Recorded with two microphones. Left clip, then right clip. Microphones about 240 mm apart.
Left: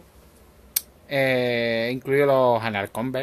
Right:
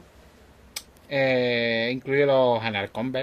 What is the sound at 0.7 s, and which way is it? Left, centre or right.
Speech, centre.